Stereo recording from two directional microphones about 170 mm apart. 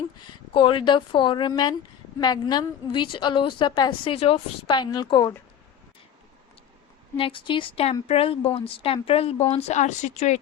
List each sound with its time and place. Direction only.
0.5 s a woman's voice: 30° left (ahead or behind)
7.2 s speech: 30° left (ahead or behind)